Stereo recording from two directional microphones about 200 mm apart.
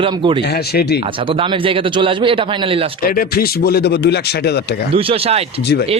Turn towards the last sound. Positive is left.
turn(degrees=-30)  # may be behind; listen again after turning